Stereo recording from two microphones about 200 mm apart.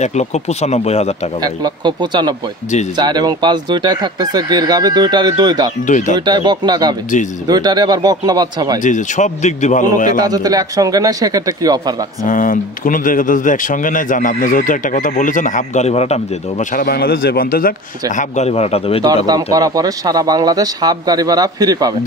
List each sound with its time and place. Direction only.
0.0 s speech: 35° left (ahead or behind)
1.4 s speech: 20° right (ahead or behind)
5.9 s speech: 40° left (ahead or behind)
6.2 s speech: 20° right (ahead or behind)
8.7 s speech: 40° left (ahead or behind)
10.2 s speech: 20° right (ahead or behind)
12.3 s speech: 40° left (ahead or behind)
16.8 s a man's voice: 50° left (ahead or behind)
18.1 s speech: 35° left (ahead or behind)
19.0 s speech: 20° right (ahead or behind)